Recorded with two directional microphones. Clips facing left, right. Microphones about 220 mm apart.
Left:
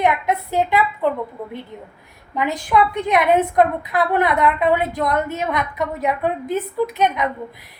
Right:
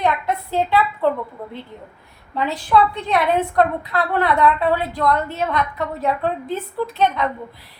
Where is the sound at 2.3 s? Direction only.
15° left (ahead or behind).